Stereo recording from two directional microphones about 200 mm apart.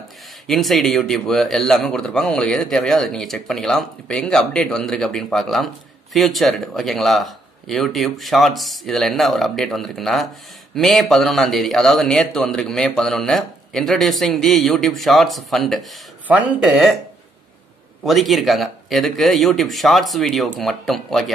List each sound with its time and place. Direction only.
0.5 s speech: centre (ahead or behind)
18.0 s speech: centre (ahead or behind)